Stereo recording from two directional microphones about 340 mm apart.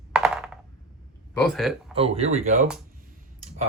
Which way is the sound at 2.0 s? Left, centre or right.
Centre.